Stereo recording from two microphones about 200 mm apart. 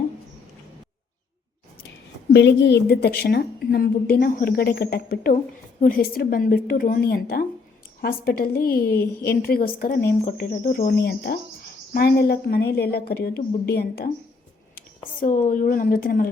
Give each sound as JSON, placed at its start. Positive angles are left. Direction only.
{"t": 2.3, "sound": "a woman's voice", "side_deg": 60}
{"t": 15.2, "sound": "a woman's voice", "side_deg": 40}